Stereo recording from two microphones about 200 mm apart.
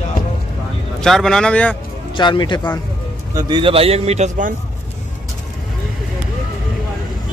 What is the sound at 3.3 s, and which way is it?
A man's voice, 25° right (ahead or behind).